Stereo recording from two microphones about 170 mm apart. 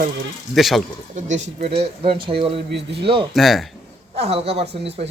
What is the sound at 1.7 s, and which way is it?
Speech, 35° right (ahead or behind).